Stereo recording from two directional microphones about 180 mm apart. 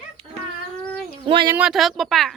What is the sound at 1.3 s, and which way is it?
Speech, 25° right (ahead or behind).